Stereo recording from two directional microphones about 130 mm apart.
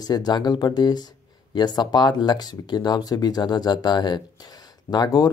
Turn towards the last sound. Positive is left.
turn(degrees=30)  # may be behind; listen again after turning